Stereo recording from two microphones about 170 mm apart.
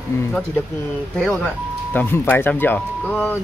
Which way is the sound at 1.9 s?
10° left (ahead or behind).